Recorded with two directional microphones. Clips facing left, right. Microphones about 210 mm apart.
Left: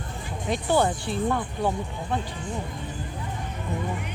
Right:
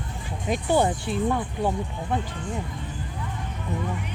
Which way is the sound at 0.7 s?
15° right (ahead or behind).